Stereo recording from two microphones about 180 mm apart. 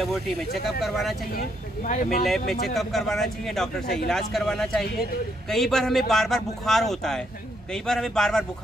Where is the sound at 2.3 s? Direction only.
Centre (ahead or behind).